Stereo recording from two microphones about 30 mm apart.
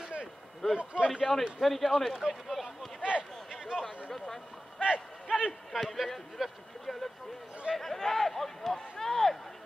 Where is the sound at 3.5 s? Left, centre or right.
Centre.